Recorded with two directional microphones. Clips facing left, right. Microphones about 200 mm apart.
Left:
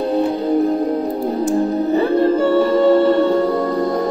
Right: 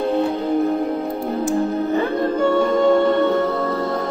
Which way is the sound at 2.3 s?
5° left (ahead or behind).